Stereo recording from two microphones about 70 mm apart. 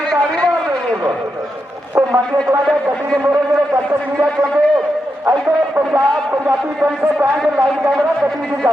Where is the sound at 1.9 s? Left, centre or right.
Right.